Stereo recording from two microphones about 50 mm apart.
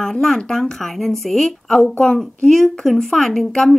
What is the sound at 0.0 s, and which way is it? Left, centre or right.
A woman's voice, centre.